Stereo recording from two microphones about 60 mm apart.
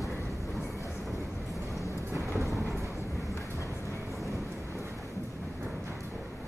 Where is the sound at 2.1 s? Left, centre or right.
Right.